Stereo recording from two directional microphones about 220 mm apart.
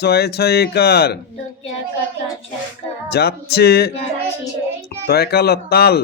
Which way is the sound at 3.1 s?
45° left (ahead or behind).